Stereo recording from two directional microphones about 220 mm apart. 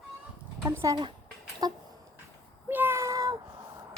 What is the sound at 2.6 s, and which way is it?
Meow, 10° right (ahead or behind).